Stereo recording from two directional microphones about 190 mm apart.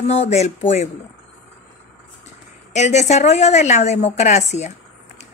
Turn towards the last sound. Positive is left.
turn(degrees=35)  # may be behind; listen again after turning